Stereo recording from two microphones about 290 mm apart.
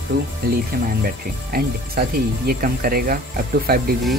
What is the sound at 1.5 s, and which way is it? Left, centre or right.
Speech, right.